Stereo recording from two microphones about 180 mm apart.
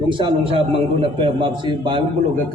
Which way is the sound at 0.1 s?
25° right (ahead or behind).